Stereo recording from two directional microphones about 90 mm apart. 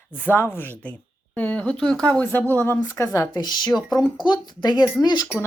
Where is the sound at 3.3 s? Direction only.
50° left (ahead or behind).